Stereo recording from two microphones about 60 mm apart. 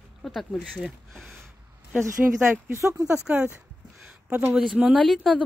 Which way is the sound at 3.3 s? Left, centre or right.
Right.